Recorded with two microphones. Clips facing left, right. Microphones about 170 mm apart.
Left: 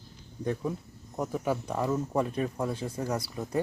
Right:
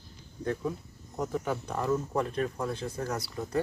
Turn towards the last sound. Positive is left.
turn(degrees=15)  # may be behind; listen again after turning